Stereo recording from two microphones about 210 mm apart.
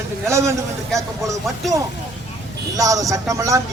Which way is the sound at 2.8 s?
15° right (ahead or behind).